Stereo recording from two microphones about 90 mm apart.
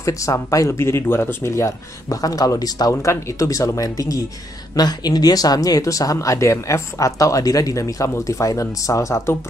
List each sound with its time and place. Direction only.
0.0 s speech: 35° left (ahead or behind)
2.9 s speech: 35° left (ahead or behind)